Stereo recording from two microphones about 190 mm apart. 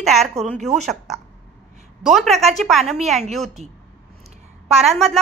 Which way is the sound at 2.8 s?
35° right (ahead or behind).